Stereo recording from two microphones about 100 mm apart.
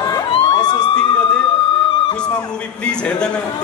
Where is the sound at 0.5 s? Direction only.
45° left (ahead or behind).